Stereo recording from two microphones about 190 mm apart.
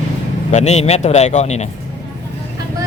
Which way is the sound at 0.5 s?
35° left (ahead or behind).